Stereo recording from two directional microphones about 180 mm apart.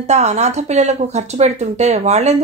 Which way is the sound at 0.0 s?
40° right (ahead or behind).